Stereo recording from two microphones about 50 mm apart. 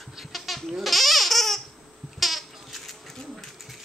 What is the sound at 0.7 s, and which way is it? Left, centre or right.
Goat, centre.